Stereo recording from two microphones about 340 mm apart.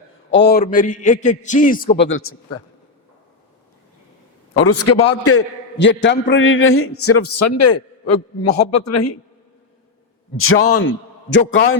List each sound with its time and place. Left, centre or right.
0.3 s a man's voice: left
4.6 s a man's voice: left
10.3 s a man's voice: left